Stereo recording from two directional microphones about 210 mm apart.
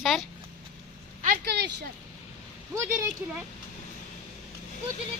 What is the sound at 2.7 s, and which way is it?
Speech, 10° right (ahead or behind).